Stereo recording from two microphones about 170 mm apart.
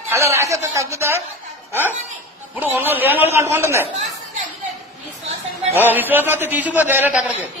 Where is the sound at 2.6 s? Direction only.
10° right (ahead or behind).